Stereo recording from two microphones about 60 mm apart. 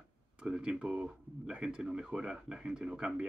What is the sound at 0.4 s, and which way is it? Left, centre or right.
Speech, centre.